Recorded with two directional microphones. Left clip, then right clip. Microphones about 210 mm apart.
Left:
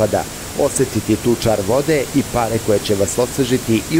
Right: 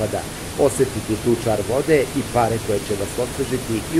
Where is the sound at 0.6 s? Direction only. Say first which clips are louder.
Left 1 dB; 50° left (ahead or behind).